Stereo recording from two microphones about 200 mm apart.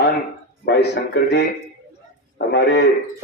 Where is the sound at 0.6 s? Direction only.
55° left (ahead or behind).